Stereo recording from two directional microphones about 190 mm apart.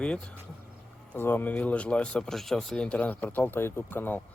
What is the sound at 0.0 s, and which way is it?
Speech, 5° left (ahead or behind).